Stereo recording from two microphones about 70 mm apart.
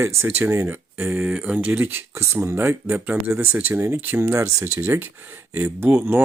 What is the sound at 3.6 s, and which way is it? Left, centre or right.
Speech, right.